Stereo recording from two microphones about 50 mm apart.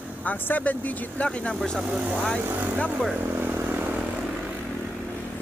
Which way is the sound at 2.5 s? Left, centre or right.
Right.